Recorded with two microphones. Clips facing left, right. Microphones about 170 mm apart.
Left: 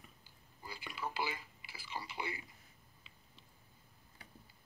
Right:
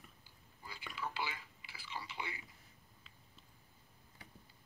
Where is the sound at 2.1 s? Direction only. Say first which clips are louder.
Left 6 dB; 40° left (ahead or behind).